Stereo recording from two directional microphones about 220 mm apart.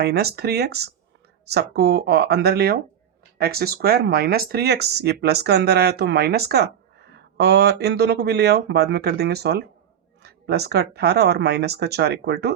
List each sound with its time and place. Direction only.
0.0 s speech: 45° right (ahead or behind)